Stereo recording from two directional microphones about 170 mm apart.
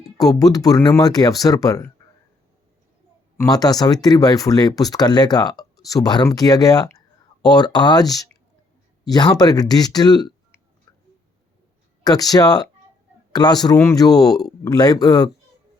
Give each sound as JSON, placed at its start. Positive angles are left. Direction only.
{"t": 0.2, "sound": "speech", "side_deg": 20}
{"t": 3.5, "sound": "speech", "side_deg": 20}
{"t": 9.0, "sound": "speech", "side_deg": 25}
{"t": 12.0, "sound": "speech", "side_deg": 20}